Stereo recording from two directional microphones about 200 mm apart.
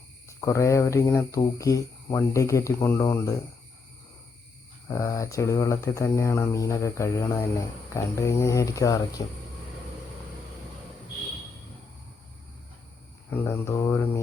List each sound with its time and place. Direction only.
0.3 s speech: 15° left (ahead or behind)
4.9 s speech: 15° left (ahead or behind)
13.3 s speech: 10° left (ahead or behind)